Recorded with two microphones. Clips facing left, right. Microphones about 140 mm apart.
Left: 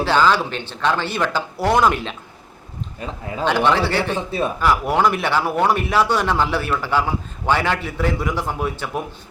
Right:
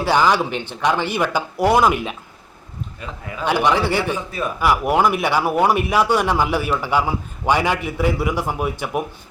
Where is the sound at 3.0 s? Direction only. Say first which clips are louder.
Left 5 dB; 30° left (ahead or behind).